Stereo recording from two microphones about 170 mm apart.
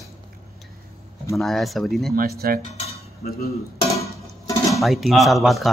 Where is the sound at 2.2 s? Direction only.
60° right (ahead or behind).